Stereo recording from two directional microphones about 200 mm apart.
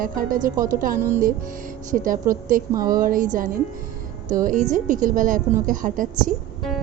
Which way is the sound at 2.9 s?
45° right (ahead or behind).